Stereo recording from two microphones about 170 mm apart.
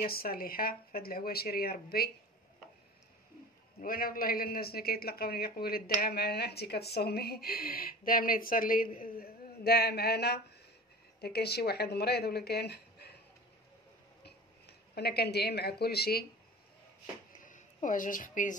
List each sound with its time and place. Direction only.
0.0 s speech: 60° left (ahead or behind)
3.8 s speech: 60° left (ahead or behind)
14.2 s speech: 75° left (ahead or behind)
17.4 s a woman's voice: 50° left (ahead or behind)